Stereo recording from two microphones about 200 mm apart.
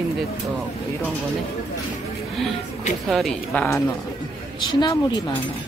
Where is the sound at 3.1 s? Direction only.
Centre (ahead or behind).